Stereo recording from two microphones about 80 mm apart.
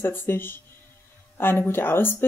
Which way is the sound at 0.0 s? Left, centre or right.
Left.